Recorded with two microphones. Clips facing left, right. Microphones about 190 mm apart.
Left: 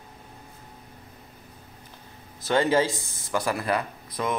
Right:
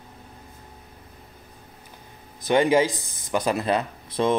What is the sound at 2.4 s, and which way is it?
Speech, 15° right (ahead or behind).